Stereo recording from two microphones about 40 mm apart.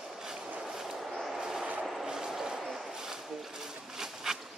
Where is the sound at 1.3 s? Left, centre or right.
Centre.